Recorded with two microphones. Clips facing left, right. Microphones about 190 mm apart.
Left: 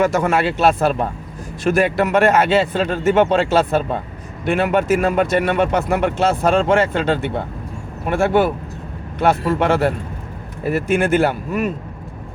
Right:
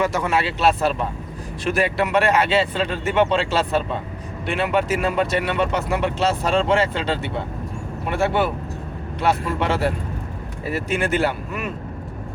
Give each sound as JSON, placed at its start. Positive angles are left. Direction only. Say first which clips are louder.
{"t": 0.0, "sound": "speech", "louder": "left 5 dB", "side_deg": 50}